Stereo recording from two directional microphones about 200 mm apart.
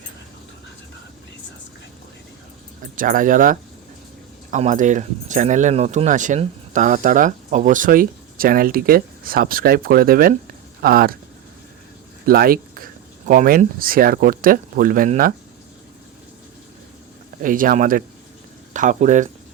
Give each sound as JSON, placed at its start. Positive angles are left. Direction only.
{"t": 2.8, "sound": "speech", "side_deg": -45}
{"t": 12.2, "sound": "speech", "side_deg": -45}
{"t": 17.4, "sound": "speech", "side_deg": -45}